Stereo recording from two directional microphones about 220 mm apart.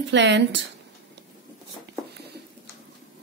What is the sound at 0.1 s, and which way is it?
Speech, 55° right (ahead or behind).